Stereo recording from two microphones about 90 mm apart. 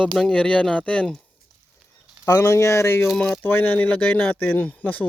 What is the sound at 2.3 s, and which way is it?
Speech, 35° left (ahead or behind).